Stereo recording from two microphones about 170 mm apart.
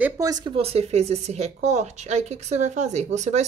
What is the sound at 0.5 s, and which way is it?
Speech, 35° right (ahead or behind).